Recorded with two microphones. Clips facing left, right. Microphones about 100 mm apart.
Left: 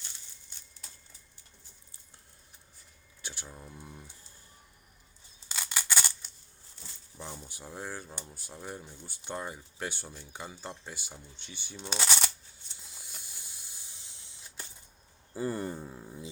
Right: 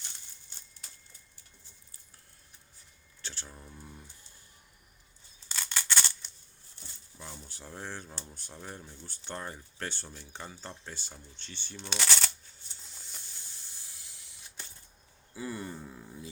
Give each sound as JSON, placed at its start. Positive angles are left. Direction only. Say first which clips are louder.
{"t": 3.2, "sound": "speech", "louder": "left 1 dB", "side_deg": 15}
{"t": 5.5, "sound": "a sound", "louder": "even", "side_deg": 10}
{"t": 7.2, "sound": "speech", "louder": "left 3 dB", "side_deg": 15}
{"t": 12.8, "sound": "snake", "louder": "left 1 dB", "side_deg": 10}
{"t": 15.3, "sound": "a sound", "louder": "left 5 dB", "side_deg": 40}
{"t": 15.8, "sound": "speech", "louder": "left 2 dB", "side_deg": 15}